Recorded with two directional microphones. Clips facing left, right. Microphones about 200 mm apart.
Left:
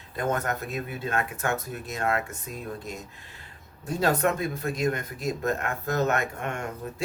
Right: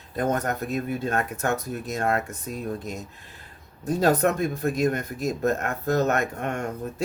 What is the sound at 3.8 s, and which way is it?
Speech, 40° right (ahead or behind).